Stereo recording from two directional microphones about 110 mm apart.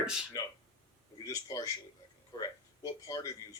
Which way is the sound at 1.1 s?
35° left (ahead or behind).